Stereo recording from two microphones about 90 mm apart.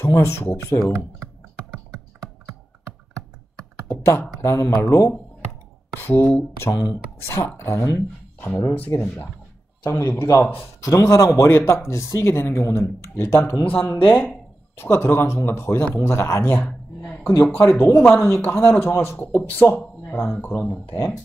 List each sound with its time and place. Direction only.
0.0 s speech: 30° left (ahead or behind)
3.9 s computer keyboard: 30° left (ahead or behind)
4.4 s speech: 30° left (ahead or behind)
5.9 s speech: 25° left (ahead or behind)
10.8 s speech: 35° left (ahead or behind); by 20.5 s 20° left (ahead or behind)